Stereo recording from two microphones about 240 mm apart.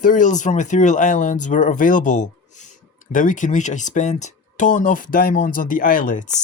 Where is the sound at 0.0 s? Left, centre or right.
Left.